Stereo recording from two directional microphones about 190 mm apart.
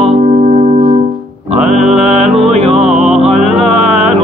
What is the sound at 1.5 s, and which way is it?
Music, 35° right (ahead or behind).